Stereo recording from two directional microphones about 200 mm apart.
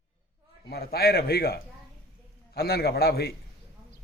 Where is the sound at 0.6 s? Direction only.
50° left (ahead or behind).